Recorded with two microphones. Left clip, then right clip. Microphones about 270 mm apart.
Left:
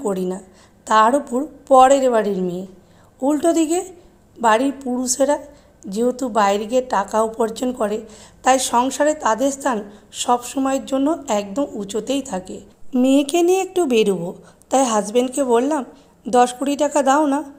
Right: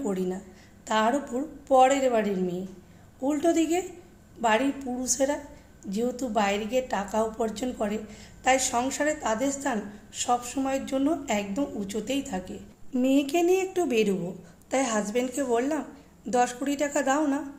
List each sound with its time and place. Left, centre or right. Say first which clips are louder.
0.0 s a woman's voice: left 7 dB; left